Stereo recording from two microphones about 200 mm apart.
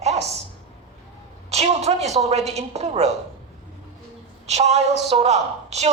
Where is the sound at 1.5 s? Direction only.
35° right (ahead or behind).